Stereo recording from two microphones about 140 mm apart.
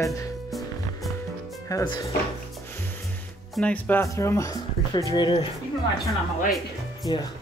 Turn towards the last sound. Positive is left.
turn(degrees=30)  # may be behind; listen again after turning